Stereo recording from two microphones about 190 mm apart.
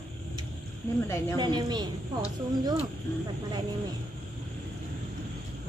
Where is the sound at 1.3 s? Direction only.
25° right (ahead or behind).